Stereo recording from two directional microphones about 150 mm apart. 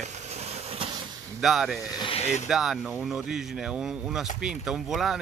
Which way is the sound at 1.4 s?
Centre (ahead or behind).